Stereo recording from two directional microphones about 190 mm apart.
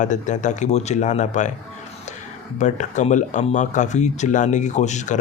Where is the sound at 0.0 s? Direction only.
40° left (ahead or behind).